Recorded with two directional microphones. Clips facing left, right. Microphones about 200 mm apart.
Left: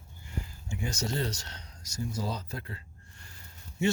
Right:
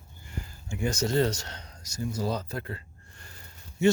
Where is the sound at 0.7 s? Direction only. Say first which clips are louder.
Right 7 dB; 50° right (ahead or behind).